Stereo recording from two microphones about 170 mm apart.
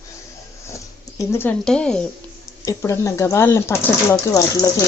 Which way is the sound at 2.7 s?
20° left (ahead or behind).